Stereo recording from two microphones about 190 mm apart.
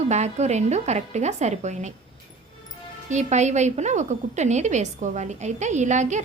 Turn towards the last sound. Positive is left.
turn(degrees=-40)  # may be behind; listen again after turning